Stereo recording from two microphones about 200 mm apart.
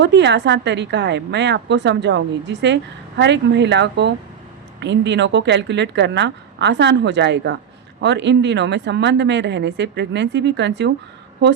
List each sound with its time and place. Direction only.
0.0 s a woman's voice: 60° right (ahead or behind)